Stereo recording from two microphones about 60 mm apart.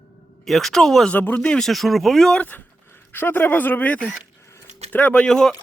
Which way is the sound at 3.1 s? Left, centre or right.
Left.